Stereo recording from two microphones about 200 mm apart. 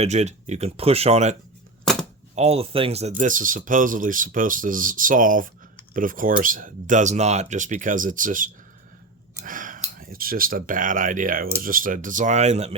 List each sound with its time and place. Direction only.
0.0 s speech: 35° right (ahead or behind)
1.8 s a sound: 5° left (ahead or behind)
2.3 s speech: 30° right (ahead or behind)